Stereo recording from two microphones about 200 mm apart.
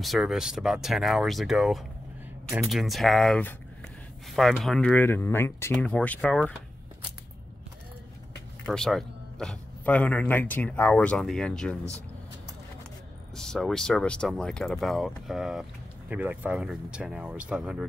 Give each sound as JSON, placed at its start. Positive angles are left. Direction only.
{"t": 0.0, "sound": "a man's voice", "side_deg": 0}
{"t": 8.6, "sound": "a man's voice", "side_deg": 5}
{"t": 13.4, "sound": "a man's voice", "side_deg": 0}